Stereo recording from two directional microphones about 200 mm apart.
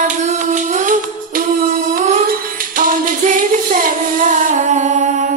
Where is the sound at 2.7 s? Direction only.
40° right (ahead or behind).